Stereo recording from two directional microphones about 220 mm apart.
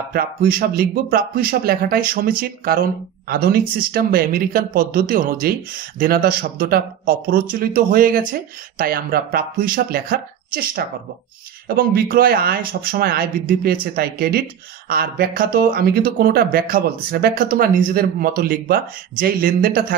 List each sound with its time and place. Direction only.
0.1 s speech: 40° right (ahead or behind)